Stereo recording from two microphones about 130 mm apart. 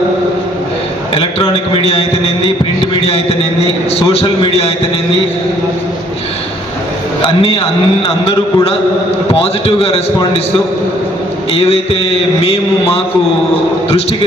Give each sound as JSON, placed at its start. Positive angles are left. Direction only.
{"t": 1.1, "sound": "a man's voice", "side_deg": 45}
{"t": 4.1, "sound": "a man's voice", "side_deg": 50}
{"t": 7.2, "sound": "a man's voice", "side_deg": 45}
{"t": 11.5, "sound": "a man's voice", "side_deg": 45}
{"t": 13.9, "sound": "a man's voice", "side_deg": 50}